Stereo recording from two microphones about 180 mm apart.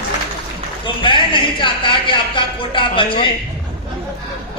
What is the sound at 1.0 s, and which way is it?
Speech, 25° left (ahead or behind).